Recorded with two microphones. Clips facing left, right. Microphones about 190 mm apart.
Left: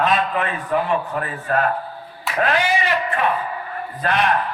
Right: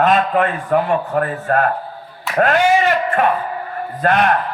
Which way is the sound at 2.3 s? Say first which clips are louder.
Right 6 dB; 45° right (ahead or behind).